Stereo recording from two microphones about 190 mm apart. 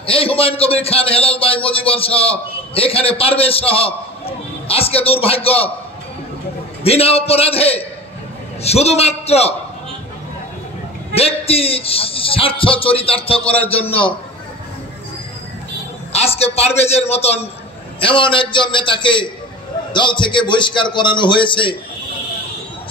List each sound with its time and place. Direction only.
0.0 s a man's voice: 30° left (ahead or behind)
6.8 s a man's voice: 30° left (ahead or behind)
11.1 s a man's voice: 30° left (ahead or behind)
13.4 s a man's voice: 5° left (ahead or behind)
13.7 s a man's voice: 30° left (ahead or behind)
16.1 s a man's voice: 35° left (ahead or behind)